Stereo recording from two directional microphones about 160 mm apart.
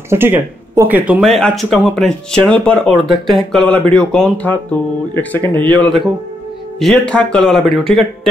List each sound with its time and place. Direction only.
0.1 s speech: 15° right (ahead or behind)
1.2 s speech: centre (ahead or behind)